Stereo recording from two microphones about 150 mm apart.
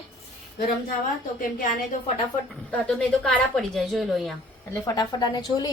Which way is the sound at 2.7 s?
5° left (ahead or behind).